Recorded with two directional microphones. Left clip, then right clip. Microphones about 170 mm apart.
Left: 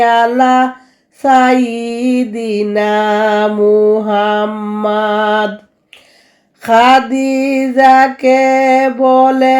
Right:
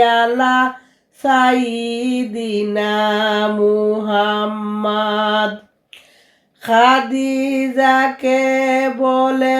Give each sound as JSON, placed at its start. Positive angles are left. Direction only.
{"t": 0.0, "sound": "female singing", "side_deg": 35}
{"t": 6.6, "sound": "female singing", "side_deg": 35}